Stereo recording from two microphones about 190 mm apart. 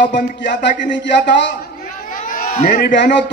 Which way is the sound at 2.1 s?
50° left (ahead or behind).